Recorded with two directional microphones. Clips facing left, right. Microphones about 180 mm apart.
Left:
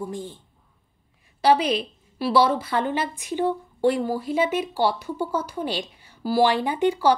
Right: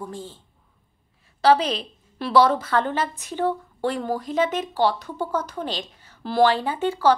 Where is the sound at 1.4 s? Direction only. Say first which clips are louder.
Right 1 dB; 10° left (ahead or behind).